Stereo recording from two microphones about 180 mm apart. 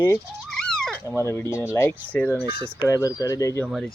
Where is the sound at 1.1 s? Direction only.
15° left (ahead or behind).